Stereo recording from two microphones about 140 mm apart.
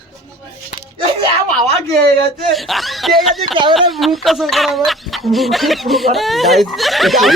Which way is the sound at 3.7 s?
Centre (ahead or behind).